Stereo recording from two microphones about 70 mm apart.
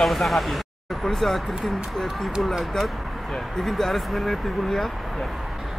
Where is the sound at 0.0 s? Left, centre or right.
Centre.